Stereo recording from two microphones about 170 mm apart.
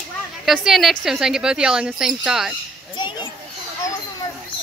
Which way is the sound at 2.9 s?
25° left (ahead or behind).